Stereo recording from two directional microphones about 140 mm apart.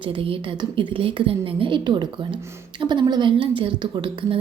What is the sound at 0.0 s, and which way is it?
A woman's voice, 40° right (ahead or behind).